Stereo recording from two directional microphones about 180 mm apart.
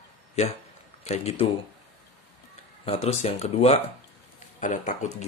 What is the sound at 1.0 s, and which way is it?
Speech, 35° left (ahead or behind).